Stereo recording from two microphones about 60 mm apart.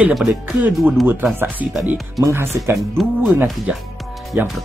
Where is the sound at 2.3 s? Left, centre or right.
Right.